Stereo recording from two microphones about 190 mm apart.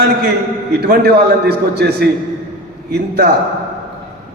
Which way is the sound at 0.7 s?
60° right (ahead or behind).